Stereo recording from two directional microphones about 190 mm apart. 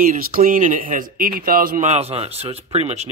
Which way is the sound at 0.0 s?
45° right (ahead or behind).